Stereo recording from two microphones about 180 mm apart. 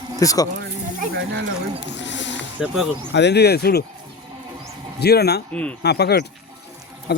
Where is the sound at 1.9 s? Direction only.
80° left.